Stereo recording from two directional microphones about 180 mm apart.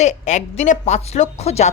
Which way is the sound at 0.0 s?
40° left (ahead or behind).